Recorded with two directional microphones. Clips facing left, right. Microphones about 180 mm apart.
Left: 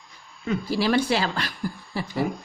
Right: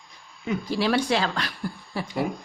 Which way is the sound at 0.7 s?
5° left (ahead or behind).